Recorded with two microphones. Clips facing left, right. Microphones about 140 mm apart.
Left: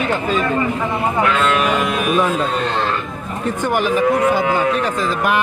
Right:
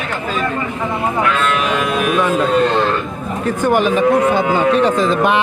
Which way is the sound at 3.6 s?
20° right (ahead or behind).